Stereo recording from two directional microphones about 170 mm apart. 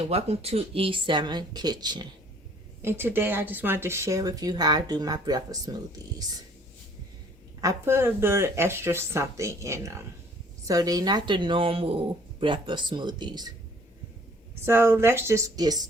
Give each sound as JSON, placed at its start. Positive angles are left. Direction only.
{"t": 0.1, "sound": "speech", "side_deg": -40}
{"t": 2.8, "sound": "speech", "side_deg": -10}
{"t": 7.6, "sound": "speech", "side_deg": -15}
{"t": 14.6, "sound": "speech", "side_deg": -15}